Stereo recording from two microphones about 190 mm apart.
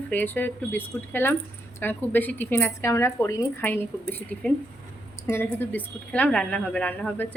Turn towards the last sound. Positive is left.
turn(degrees=5)  # may be behind; listen again after turning